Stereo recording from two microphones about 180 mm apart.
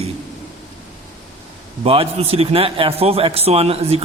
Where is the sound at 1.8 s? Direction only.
35° right (ahead or behind).